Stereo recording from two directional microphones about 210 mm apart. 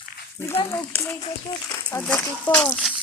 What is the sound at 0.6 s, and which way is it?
Speech, 15° left (ahead or behind).